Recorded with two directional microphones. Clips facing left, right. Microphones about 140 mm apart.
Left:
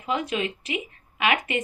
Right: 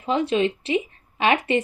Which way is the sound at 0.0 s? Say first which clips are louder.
Right 6 dB; 30° right (ahead or behind).